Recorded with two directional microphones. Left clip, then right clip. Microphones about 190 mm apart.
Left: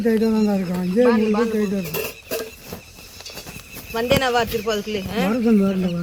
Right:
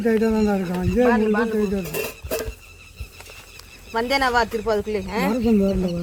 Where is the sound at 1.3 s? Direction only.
20° right (ahead or behind).